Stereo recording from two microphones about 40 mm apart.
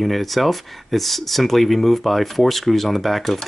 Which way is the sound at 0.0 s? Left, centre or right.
Centre.